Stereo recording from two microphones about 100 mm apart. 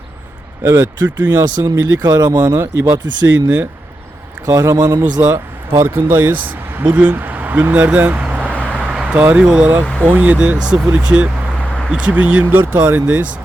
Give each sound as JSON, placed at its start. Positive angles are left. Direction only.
{"t": 0.6, "sound": "speech", "side_deg": -35}
{"t": 1.0, "sound": "speech", "side_deg": -20}
{"t": 1.4, "sound": "speech", "side_deg": -30}
{"t": 2.6, "sound": "speech", "side_deg": -30}
{"t": 4.4, "sound": "speech", "side_deg": -30}
{"t": 5.2, "sound": "speech", "side_deg": -20}